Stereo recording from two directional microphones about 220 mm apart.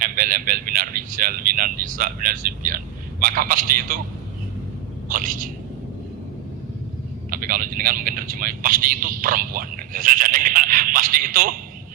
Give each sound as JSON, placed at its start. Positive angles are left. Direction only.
{"t": 0.0, "sound": "speech", "side_deg": -40}
{"t": 5.0, "sound": "speech", "side_deg": -40}
{"t": 7.3, "sound": "speech", "side_deg": -40}